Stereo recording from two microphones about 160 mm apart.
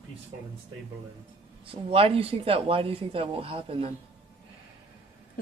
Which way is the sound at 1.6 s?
35° right (ahead or behind).